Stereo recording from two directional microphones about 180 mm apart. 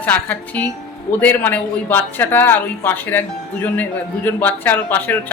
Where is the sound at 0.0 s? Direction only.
10° left (ahead or behind).